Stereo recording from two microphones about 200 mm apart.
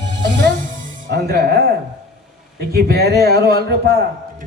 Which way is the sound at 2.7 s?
50° right (ahead or behind).